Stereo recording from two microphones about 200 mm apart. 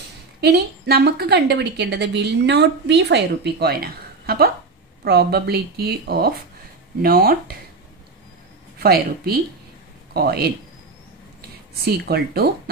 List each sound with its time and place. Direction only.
0.4 s a woman's voice: 55° right (ahead or behind)
8.7 s speech: 50° right (ahead or behind)
11.7 s speech: 50° right (ahead or behind)